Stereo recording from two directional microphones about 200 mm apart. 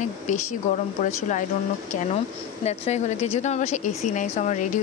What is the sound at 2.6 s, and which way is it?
A woman's voice, 35° left (ahead or behind).